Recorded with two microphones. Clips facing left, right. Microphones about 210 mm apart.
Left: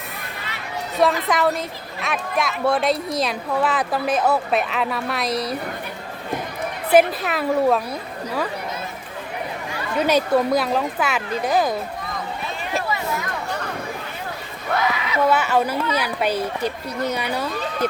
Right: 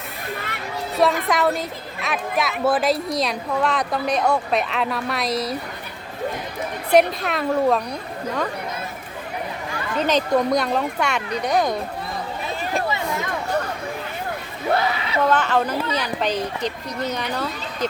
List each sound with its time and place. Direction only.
1.3 s speech: centre (ahead or behind)
6.9 s speech: 5° left (ahead or behind)
10.0 s speech: 10° left (ahead or behind)
14.7 s a sound: 30° right (ahead or behind)
15.3 s speech: 10° left (ahead or behind)